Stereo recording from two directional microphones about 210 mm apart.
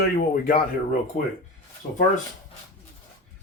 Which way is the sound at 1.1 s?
35° left (ahead or behind).